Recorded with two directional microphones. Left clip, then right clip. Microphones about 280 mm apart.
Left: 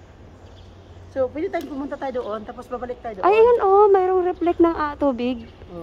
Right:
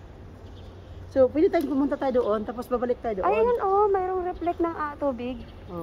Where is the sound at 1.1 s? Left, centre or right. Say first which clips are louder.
Right 3 dB; right.